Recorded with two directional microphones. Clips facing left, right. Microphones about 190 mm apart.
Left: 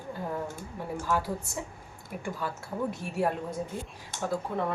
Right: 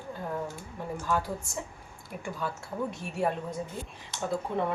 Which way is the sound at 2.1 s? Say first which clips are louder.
Left 1 dB; centre (ahead or behind).